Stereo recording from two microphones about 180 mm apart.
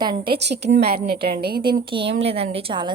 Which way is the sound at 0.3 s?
70° right (ahead or behind).